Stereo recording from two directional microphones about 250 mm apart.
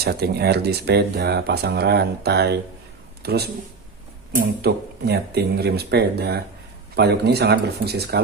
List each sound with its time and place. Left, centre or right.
0.0 s speech: right
3.2 s a sound: right
4.6 s speech: right